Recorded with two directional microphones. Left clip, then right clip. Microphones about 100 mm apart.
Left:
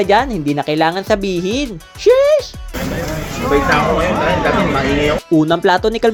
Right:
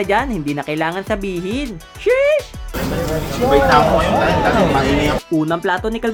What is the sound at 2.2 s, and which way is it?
Music, 10° left (ahead or behind).